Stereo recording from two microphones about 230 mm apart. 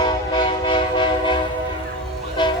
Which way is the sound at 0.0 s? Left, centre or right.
Left.